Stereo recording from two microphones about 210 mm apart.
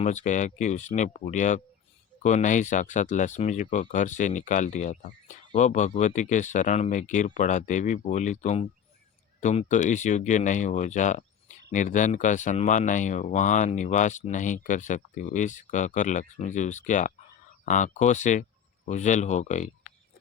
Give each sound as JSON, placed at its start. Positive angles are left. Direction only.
{"t": 0.0, "sound": "speech", "side_deg": 35}